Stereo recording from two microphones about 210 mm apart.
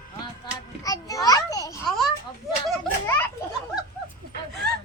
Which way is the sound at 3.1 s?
10° left (ahead or behind).